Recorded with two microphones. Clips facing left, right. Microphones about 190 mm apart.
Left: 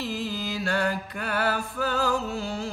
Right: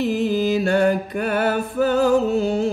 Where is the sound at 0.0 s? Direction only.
20° right (ahead or behind).